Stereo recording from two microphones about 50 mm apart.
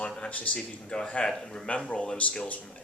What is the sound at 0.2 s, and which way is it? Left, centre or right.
Speech, left.